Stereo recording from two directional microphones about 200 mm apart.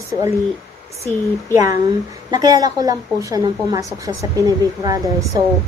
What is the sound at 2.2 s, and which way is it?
A woman's voice, 20° right (ahead or behind).